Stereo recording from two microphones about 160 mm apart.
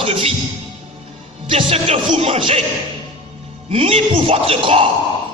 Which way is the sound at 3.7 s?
35° right (ahead or behind).